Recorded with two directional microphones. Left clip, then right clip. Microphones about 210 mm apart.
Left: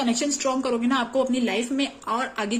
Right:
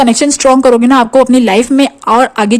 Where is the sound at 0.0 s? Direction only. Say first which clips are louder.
Right 16 dB; 55° right (ahead or behind).